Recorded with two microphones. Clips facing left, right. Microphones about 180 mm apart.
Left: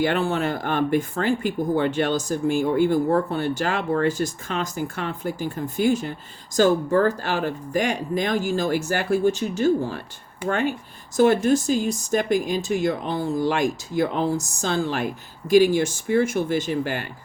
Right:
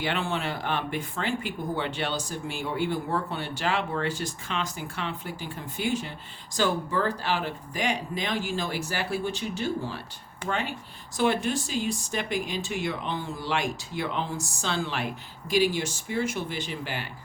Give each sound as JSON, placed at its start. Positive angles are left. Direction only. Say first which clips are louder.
{"t": 0.0, "sound": "speech", "louder": "left 7 dB", "side_deg": 45}